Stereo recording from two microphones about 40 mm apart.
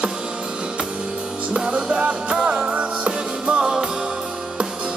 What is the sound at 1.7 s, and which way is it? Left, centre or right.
Music, right.